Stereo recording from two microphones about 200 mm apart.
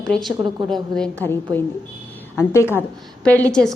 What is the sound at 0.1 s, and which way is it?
A woman's voice, centre (ahead or behind).